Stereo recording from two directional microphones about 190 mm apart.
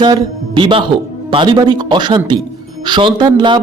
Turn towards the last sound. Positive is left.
turn(degrees=-25)  # may be behind; listen again after turning